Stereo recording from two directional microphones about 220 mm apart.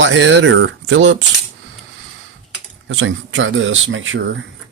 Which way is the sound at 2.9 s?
60° right (ahead or behind).